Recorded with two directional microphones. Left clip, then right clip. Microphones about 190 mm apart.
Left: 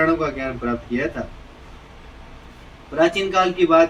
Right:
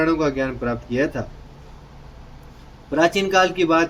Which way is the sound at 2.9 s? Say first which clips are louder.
Right 1 dB; 70° right (ahead or behind).